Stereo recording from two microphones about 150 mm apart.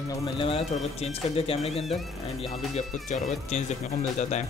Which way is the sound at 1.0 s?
45° left (ahead or behind).